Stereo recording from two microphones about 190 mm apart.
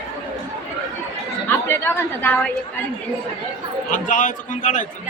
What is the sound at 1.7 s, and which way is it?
Speech, 10° left (ahead or behind).